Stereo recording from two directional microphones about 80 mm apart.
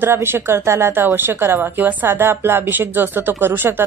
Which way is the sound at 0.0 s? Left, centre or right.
Right.